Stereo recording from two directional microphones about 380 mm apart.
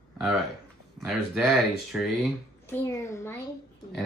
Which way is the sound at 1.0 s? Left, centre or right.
Centre.